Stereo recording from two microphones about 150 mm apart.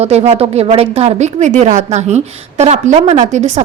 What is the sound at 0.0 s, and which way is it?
A woman's voice, 45° right (ahead or behind).